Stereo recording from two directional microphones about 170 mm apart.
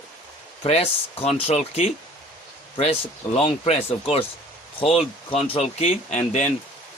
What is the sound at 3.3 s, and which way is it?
Speech, 35° left (ahead or behind).